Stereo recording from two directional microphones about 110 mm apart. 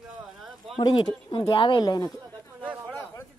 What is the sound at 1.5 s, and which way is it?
Speech, 45° left (ahead or behind).